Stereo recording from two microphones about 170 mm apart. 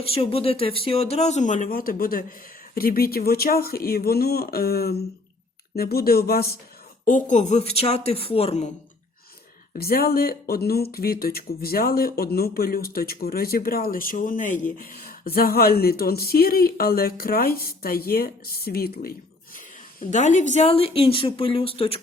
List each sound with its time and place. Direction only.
0.0 s a woman's voice: 35° left (ahead or behind); by 6.6 s 65° left (ahead or behind)
7.0 s a woman's voice: 50° left (ahead or behind)
9.7 s speech: 60° left (ahead or behind)
19.5 s a woman's voice: 50° left (ahead or behind)